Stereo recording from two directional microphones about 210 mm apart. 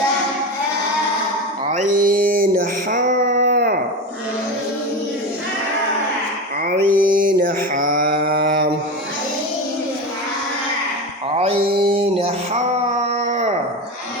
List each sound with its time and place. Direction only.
1.7 s a sound: 40° right (ahead or behind)
6.7 s mantra: 45° right (ahead or behind)
11.9 s music: 30° right (ahead or behind)